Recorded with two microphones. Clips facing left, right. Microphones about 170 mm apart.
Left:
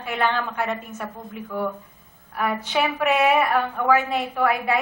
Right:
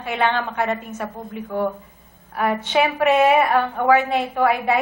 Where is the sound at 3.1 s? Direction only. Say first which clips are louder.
Right 3 dB; 30° right (ahead or behind).